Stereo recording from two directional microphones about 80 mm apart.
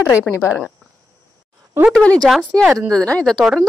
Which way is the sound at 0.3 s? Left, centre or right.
Centre.